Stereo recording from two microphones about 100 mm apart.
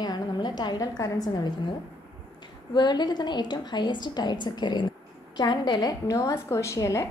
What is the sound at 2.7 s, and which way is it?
A woman's voice, 45° left (ahead or behind).